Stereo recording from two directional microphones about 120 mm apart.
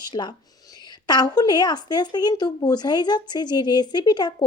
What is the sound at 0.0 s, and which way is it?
Speech, 40° left (ahead or behind).